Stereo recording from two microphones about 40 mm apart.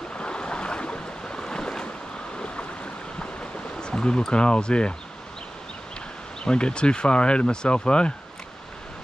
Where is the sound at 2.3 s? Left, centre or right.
Left.